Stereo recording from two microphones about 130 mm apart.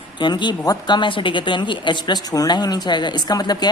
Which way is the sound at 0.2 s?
35° left (ahead or behind).